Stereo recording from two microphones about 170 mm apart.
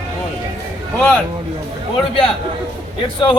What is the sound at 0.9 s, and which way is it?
Speech, 5° left (ahead or behind).